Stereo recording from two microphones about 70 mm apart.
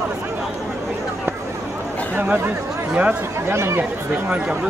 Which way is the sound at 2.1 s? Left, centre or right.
Right.